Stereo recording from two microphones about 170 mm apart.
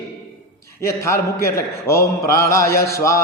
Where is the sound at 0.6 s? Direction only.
15° left (ahead or behind).